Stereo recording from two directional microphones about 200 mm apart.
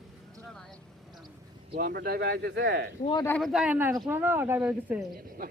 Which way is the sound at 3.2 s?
5° left (ahead or behind).